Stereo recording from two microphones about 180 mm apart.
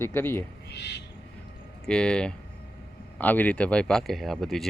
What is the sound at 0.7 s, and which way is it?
Speech, 70° left (ahead or behind).